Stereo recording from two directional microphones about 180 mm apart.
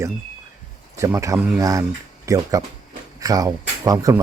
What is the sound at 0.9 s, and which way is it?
Speech, 15° right (ahead or behind).